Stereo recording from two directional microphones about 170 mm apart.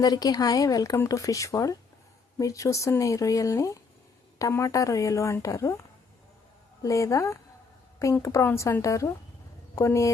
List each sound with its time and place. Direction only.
0.0 s speech: 20° left (ahead or behind)
6.8 s a woman's voice: 20° left (ahead or behind)